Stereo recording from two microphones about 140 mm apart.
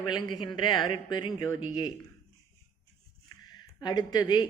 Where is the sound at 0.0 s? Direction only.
30° left (ahead or behind).